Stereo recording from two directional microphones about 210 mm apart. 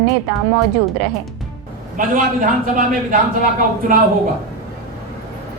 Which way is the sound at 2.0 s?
40° right (ahead or behind).